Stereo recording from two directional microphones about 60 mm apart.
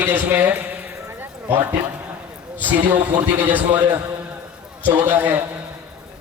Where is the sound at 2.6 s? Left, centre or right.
Right.